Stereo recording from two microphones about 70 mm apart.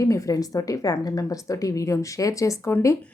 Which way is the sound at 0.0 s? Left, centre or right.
Left.